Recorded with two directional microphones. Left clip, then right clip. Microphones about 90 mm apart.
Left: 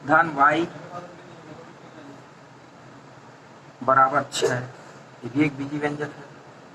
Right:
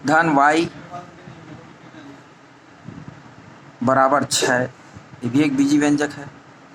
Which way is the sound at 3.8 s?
30° right (ahead or behind).